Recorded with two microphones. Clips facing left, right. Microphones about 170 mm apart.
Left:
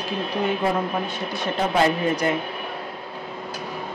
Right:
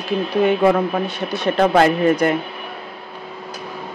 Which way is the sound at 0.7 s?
70° right (ahead or behind).